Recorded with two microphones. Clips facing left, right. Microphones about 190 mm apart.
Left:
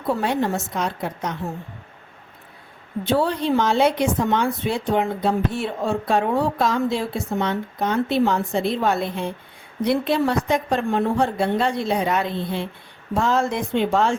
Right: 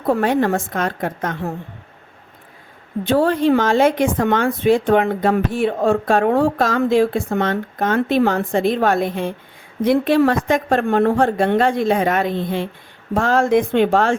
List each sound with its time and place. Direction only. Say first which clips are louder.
0.0 s speech: right 5 dB; 50° right (ahead or behind)
3.1 s speech: right 5 dB; 50° right (ahead or behind)
5.5 s speech: right 7 dB; 50° right (ahead or behind)
13.1 s speech: right 6 dB; 55° right (ahead or behind)